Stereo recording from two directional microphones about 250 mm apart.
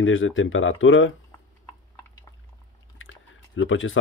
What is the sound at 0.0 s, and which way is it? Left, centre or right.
Speech, left.